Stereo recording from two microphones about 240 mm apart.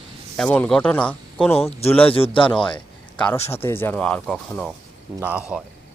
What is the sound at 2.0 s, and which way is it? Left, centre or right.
Speech, left.